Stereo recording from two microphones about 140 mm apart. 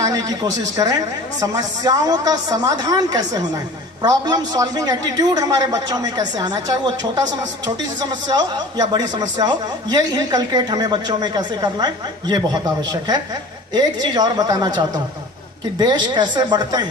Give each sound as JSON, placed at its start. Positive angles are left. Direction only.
{"t": 0.0, "sound": "a man's voice", "side_deg": -25}
{"t": 12.9, "sound": "a man's voice", "side_deg": -30}